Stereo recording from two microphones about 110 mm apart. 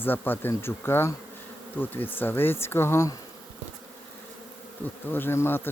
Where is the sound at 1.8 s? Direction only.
15° left (ahead or behind).